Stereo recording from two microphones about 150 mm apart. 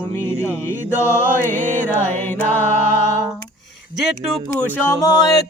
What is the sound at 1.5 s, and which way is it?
Music, 55° right (ahead or behind).